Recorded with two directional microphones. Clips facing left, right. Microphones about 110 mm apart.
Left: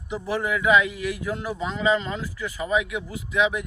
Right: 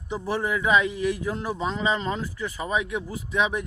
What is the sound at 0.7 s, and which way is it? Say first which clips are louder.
Speech: even; 35° right (ahead or behind).